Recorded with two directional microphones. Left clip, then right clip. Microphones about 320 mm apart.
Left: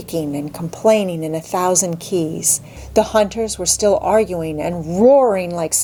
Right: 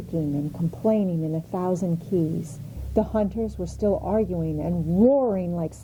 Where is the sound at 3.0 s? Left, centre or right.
Centre.